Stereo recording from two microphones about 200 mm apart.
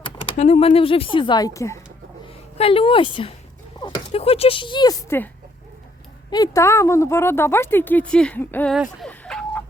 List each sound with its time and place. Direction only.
0.0 s speech: 30° left (ahead or behind)
2.6 s speech: 30° left (ahead or behind); by 5.3 s 10° left (ahead or behind)
6.3 s speech: 20° left (ahead or behind)
8.7 s a sound: centre (ahead or behind)